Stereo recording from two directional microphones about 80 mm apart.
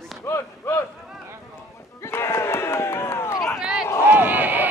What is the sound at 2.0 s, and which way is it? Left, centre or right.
Crowd, left.